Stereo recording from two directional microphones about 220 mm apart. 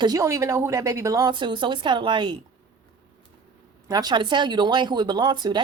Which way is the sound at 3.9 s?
15° right (ahead or behind).